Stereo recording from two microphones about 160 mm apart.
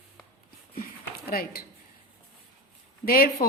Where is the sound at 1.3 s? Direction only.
70° left (ahead or behind).